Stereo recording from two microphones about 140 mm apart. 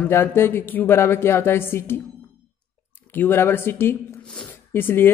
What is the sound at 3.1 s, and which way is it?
A man's voice, 15° left (ahead or behind).